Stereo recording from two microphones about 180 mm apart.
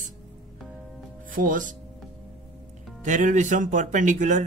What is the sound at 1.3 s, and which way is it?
Speech, 50° right (ahead or behind).